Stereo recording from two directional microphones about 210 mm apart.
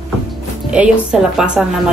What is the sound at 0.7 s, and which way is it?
Speech, 5° right (ahead or behind).